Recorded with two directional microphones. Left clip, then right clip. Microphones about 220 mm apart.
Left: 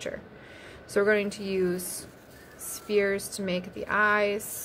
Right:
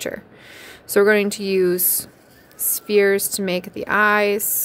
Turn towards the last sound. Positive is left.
turn(degrees=-50)  # may be behind; listen again after turning